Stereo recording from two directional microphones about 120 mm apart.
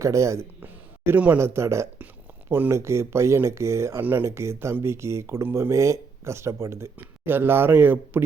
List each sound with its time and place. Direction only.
0.0 s speech: 25° right (ahead or behind)